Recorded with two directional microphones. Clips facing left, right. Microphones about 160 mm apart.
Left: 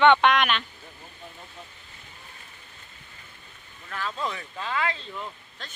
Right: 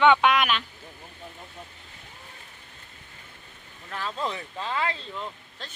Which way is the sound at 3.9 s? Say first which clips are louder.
Right 1 dB; 30° right (ahead or behind).